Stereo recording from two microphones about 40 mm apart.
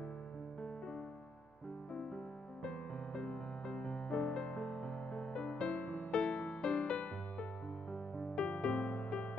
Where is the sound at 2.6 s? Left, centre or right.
Left.